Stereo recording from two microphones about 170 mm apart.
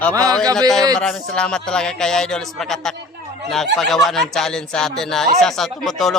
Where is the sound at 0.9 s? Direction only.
5° left (ahead or behind).